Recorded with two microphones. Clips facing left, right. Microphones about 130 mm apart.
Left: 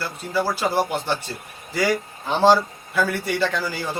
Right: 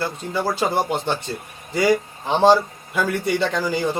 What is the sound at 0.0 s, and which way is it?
A man's voice, 20° right (ahead or behind).